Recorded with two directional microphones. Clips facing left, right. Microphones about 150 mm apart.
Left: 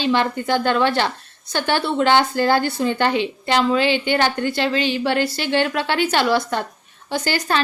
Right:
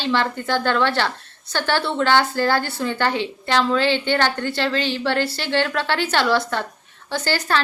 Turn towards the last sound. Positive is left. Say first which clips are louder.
# left 1 dB
turn(degrees=15)  # may be behind; listen again after turning